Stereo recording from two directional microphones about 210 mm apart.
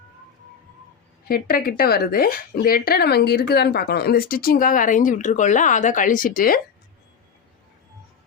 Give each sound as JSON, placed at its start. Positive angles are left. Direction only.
{"t": 1.3, "sound": "speech", "side_deg": 45}